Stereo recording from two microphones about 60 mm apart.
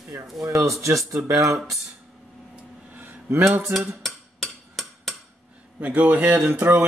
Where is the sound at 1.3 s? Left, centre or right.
Right.